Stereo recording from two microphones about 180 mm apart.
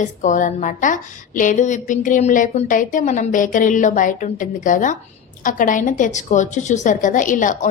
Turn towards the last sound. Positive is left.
turn(degrees=45)  # may be behind; listen again after turning